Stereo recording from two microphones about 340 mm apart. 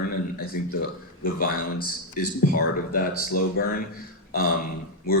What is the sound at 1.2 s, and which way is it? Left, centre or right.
Speech, left.